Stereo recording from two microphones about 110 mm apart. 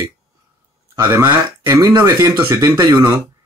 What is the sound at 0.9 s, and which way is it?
Speech, 20° right (ahead or behind).